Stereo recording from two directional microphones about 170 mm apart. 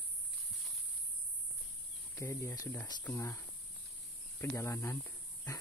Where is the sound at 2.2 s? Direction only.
15° left (ahead or behind).